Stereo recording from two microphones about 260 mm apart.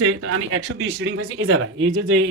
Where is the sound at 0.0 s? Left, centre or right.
Right.